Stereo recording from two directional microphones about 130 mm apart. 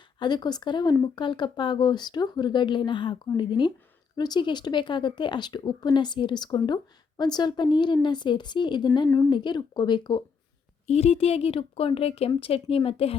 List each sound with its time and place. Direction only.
0.2 s speech: 35° left (ahead or behind)
10.8 s a woman's voice: 55° left (ahead or behind)